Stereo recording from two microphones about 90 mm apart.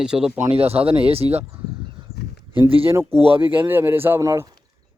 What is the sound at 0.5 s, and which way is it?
Speech, 90° right.